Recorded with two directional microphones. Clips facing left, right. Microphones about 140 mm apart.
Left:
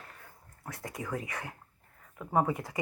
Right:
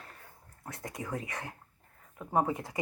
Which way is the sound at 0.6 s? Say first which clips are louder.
Left 1 dB; 20° right (ahead or behind).